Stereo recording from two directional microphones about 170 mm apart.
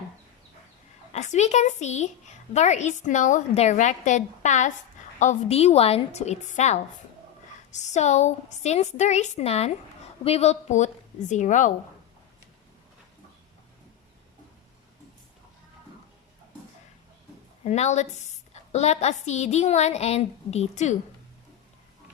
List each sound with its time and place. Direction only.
1.1 s a woman's voice: 40° left (ahead or behind)
17.6 s a woman's voice: 40° left (ahead or behind)